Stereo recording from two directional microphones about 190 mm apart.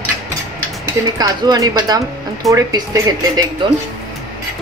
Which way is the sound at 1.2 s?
20° right (ahead or behind).